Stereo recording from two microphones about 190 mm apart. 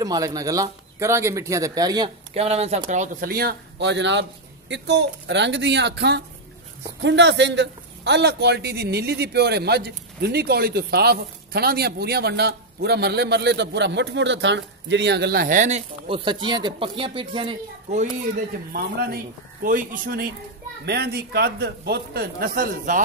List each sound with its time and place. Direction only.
0.0 s speech: 20° right (ahead or behind)
2.3 s a man's voice: 35° right (ahead or behind)
16.2 s speech: 25° right (ahead or behind)
18.7 s speech: 55° right (ahead or behind)
20.8 s a man's voice: 60° right (ahead or behind)